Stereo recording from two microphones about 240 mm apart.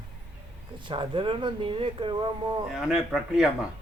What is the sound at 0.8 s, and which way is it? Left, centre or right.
Speech, right.